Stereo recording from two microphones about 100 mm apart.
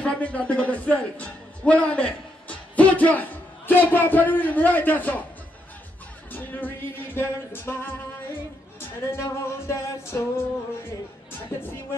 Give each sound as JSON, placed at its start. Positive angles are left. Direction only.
{"t": 0.0, "sound": "a man's voice", "side_deg": 15}
{"t": 6.3, "sound": "music", "side_deg": 20}
{"t": 9.7, "sound": "music", "side_deg": 25}